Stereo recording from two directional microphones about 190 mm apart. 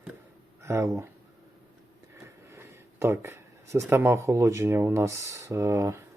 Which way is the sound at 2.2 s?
15° right (ahead or behind).